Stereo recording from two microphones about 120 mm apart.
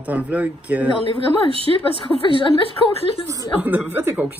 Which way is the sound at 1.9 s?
50° left (ahead or behind).